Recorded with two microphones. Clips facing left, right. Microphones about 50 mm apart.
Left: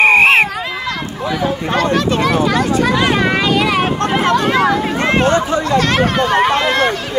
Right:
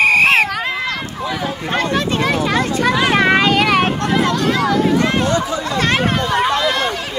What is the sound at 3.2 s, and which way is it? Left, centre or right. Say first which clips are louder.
Vehicle: right 1 dB; right.